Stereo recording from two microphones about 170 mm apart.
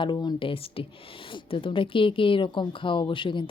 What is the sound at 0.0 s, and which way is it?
A woman's voice, 25° left (ahead or behind).